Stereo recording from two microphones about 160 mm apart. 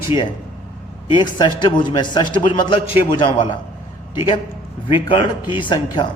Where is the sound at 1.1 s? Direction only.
30° left (ahead or behind).